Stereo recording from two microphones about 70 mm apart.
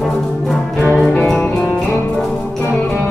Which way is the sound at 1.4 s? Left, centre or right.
Left.